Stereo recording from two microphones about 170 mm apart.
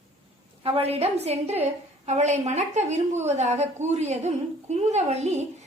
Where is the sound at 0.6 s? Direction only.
35° right (ahead or behind).